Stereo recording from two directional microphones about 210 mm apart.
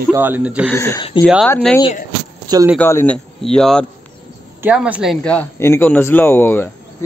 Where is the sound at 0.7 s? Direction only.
15° left (ahead or behind).